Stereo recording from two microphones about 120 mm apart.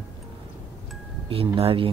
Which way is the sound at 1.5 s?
50° right (ahead or behind).